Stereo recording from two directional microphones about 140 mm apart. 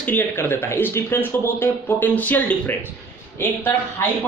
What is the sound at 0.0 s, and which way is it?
Speech, 15° left (ahead or behind).